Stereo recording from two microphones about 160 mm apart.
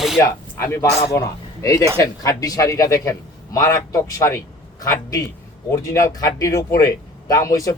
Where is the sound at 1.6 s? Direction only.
20° left (ahead or behind).